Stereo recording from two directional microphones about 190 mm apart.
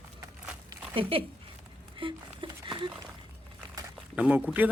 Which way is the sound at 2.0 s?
25° right (ahead or behind).